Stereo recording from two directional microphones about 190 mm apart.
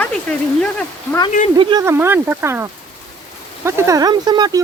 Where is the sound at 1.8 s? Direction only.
10° right (ahead or behind).